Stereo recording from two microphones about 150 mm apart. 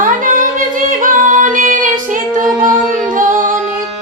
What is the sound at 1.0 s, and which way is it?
Music, 60° right (ahead or behind).